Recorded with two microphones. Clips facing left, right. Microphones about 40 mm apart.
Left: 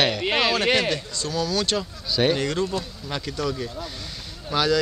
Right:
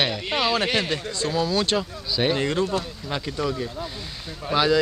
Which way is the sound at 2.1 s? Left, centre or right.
Centre.